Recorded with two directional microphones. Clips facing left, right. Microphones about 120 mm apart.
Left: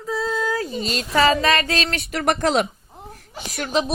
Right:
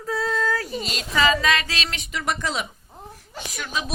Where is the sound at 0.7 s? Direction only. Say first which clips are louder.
Left 3 dB; 30° left (ahead or behind).